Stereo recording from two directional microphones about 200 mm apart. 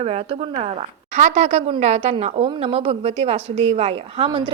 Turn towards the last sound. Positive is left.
turn(degrees=-25)  # may be behind; listen again after turning